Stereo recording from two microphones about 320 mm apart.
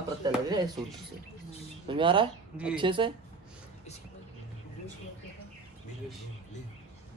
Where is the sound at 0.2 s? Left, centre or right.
Centre.